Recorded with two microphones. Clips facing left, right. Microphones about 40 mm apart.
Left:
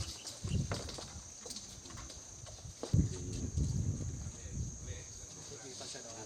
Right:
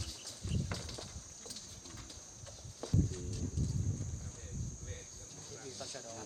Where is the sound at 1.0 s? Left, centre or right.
Centre.